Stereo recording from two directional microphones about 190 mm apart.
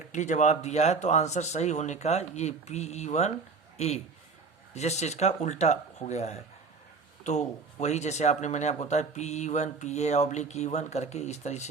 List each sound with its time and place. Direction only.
0.1 s speech: 40° left (ahead or behind)